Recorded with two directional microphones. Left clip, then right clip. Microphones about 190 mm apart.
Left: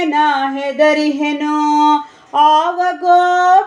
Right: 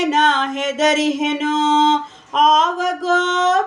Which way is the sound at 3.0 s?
5° left (ahead or behind).